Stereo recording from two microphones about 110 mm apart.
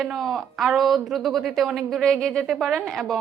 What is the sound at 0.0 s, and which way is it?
Speech, centre (ahead or behind).